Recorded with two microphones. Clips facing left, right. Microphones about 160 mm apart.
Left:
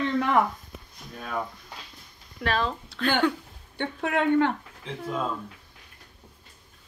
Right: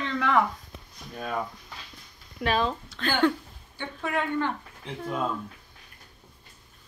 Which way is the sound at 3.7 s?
65° left (ahead or behind).